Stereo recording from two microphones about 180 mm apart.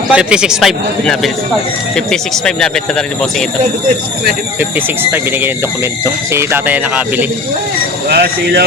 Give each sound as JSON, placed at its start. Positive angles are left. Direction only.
{"t": 0.1, "sound": "a man's voice", "side_deg": -5}
{"t": 6.3, "sound": "speech", "side_deg": -10}
{"t": 8.1, "sound": "speech", "side_deg": -60}